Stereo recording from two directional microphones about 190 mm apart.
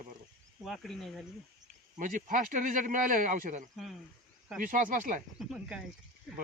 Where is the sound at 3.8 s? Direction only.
Centre (ahead or behind).